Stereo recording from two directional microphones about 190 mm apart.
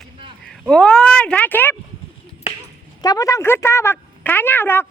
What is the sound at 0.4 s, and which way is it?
Speech, 5° left (ahead or behind).